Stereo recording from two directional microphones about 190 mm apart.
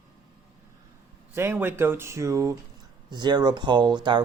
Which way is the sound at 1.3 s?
15° right (ahead or behind).